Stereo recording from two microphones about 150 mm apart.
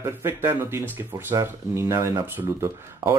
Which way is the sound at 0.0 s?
15° right (ahead or behind).